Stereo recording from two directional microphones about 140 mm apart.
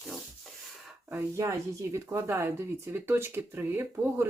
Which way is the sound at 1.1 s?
20° right (ahead or behind).